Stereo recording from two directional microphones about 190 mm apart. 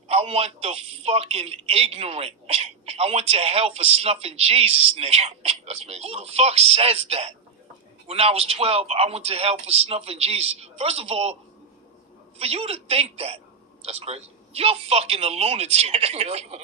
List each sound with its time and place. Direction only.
0.1 s speech: 30° right (ahead or behind)
12.4 s speech: 30° right (ahead or behind)